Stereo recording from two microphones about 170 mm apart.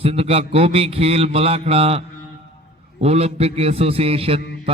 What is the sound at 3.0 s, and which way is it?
A man's voice, 40° right (ahead or behind).